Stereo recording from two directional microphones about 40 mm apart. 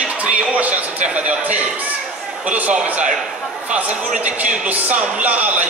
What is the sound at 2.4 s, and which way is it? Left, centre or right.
Speech, right.